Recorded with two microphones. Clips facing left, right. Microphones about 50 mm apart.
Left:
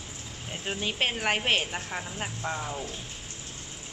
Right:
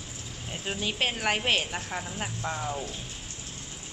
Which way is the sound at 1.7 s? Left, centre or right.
Centre.